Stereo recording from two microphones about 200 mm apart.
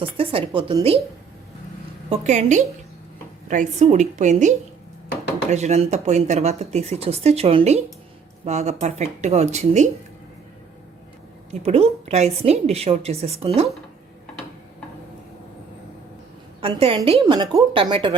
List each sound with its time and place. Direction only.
0.2 s a woman's voice: 30° right (ahead or behind)
2.0 s speech: 35° right (ahead or behind)
11.6 s speech: 30° right (ahead or behind)
17.1 s a woman's voice: 25° right (ahead or behind)